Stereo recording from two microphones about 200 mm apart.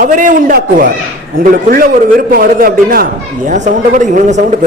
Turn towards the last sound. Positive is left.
turn(degrees=-40)  # may be behind; listen again after turning